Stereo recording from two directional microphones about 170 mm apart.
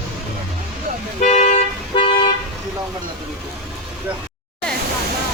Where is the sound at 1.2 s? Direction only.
45° left (ahead or behind).